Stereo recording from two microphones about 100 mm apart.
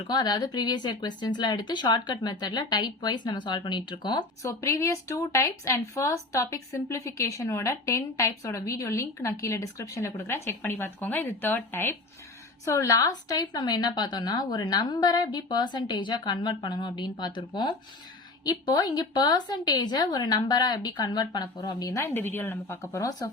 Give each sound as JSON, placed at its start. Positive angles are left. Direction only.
{"t": 0.1, "sound": "a woman's voice", "side_deg": 40}
{"t": 4.4, "sound": "a woman's voice", "side_deg": 30}